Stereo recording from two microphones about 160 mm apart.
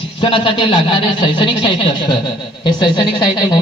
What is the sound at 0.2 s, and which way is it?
A man's voice, 30° left (ahead or behind).